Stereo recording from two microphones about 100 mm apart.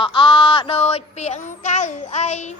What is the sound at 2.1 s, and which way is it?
Child singing, 90° left.